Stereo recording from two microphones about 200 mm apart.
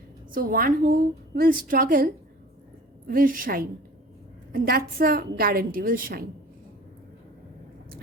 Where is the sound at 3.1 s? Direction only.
45° right (ahead or behind).